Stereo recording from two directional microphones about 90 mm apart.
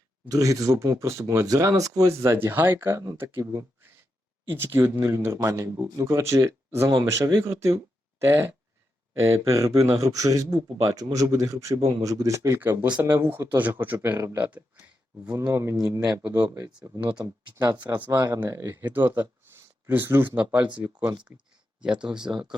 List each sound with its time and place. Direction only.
0.3 s speech: 40° right (ahead or behind)
4.5 s speech: 25° right (ahead or behind)
12.5 s speech: 25° right (ahead or behind)
15.3 s speech: 35° right (ahead or behind); by 20.7 s 15° right (ahead or behind)
21.8 s speech: 10° right (ahead or behind)